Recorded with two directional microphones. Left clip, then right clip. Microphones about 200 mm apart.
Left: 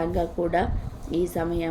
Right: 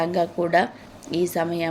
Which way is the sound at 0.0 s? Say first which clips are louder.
Right 3 dB; 15° right (ahead or behind).